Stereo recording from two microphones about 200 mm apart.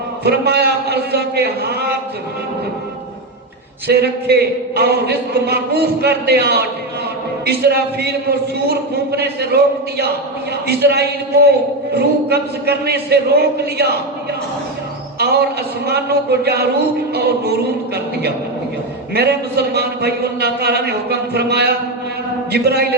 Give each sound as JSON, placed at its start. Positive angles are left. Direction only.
{"t": 0.3, "sound": "a man's voice", "side_deg": -55}
{"t": 3.8, "sound": "a man's voice", "side_deg": -55}
{"t": 15.2, "sound": "a man's voice", "side_deg": -55}